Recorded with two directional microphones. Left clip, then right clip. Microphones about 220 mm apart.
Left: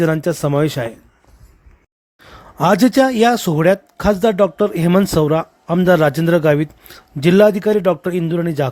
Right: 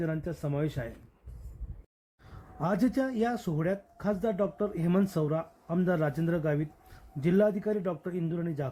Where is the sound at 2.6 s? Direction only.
40° left (ahead or behind).